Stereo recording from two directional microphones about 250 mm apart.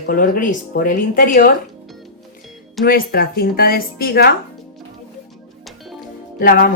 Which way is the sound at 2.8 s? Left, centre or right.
Left.